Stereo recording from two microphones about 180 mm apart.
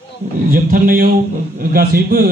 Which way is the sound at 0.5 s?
55° right (ahead or behind).